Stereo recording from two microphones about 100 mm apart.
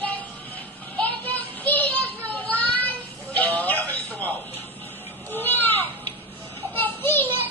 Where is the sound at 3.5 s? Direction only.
15° left (ahead or behind).